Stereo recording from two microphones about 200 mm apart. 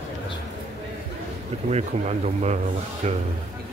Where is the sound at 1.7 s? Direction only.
35° right (ahead or behind).